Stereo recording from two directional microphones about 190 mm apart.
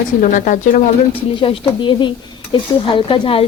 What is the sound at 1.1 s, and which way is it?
Speech, 30° left (ahead or behind).